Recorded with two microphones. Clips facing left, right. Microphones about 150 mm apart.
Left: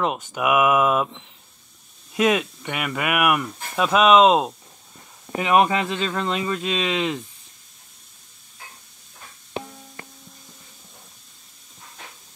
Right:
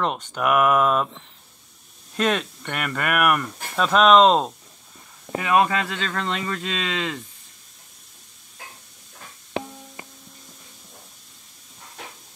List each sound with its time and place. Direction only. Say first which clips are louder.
0.0 s speech: left 1 dB; 5° left (ahead or behind)
2.1 s speech: left 3 dB; 10° left (ahead or behind)
5.3 s speech: left 2 dB; 20° left (ahead or behind)